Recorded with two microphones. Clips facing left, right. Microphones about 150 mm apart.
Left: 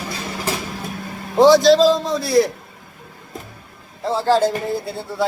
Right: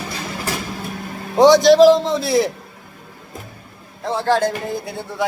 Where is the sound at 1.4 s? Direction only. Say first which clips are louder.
Right 1 dB; 20° right (ahead or behind).